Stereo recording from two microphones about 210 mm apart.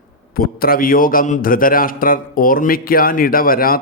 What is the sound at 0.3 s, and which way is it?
A man's voice, 45° left (ahead or behind).